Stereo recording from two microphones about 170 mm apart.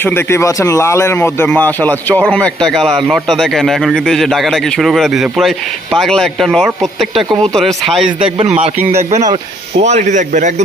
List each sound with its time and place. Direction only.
0.0 s a man's voice: 15° left (ahead or behind)
8.0 s speech: 30° right (ahead or behind)